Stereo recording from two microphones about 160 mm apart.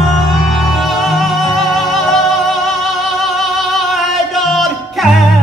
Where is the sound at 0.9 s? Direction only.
Centre (ahead or behind).